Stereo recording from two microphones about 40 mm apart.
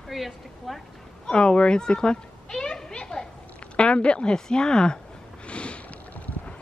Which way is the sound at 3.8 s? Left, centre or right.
Left.